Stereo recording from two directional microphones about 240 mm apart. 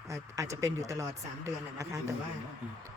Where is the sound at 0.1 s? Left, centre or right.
Centre.